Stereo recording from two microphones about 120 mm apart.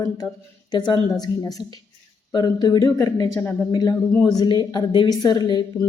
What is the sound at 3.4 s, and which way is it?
Speech, 15° left (ahead or behind).